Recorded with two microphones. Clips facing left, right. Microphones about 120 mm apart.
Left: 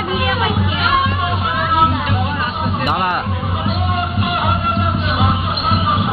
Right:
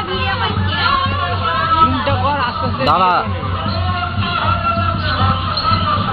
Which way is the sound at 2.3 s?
50° right (ahead or behind).